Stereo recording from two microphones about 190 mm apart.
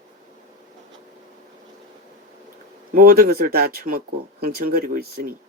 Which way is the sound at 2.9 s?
50° right (ahead or behind).